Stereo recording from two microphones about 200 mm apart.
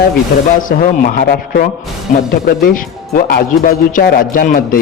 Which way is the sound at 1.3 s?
50° left (ahead or behind).